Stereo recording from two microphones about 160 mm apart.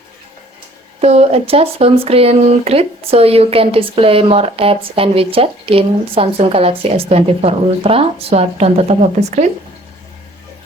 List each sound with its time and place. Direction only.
1.0 s speech: 40° right (ahead or behind)